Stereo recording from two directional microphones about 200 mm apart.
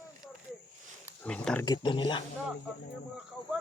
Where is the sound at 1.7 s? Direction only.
20° left (ahead or behind).